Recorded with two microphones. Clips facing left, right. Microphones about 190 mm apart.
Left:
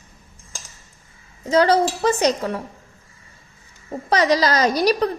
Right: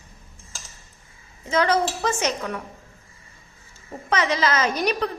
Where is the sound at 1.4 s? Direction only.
35° left (ahead or behind).